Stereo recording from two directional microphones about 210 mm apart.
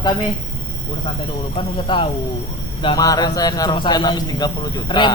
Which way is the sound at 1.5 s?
25° left (ahead or behind).